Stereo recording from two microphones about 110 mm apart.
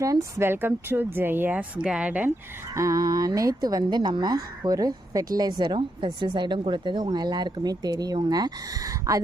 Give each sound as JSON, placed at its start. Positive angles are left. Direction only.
{"t": 0.0, "sound": "speech", "side_deg": -30}
{"t": 2.7, "sound": "speech", "side_deg": -30}